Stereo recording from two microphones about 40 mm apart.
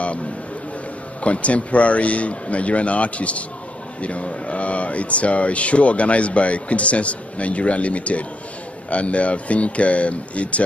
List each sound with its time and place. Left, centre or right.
1.2 s speech: left